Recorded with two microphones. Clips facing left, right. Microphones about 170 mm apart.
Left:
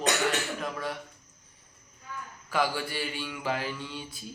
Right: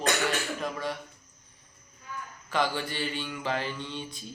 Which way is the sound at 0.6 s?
Centre (ahead or behind).